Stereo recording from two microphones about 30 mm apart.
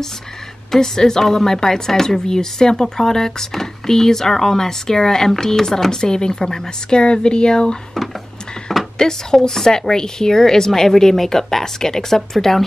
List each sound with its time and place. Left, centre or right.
0.7 s a woman's voice: centre
8.9 s a woman's voice: left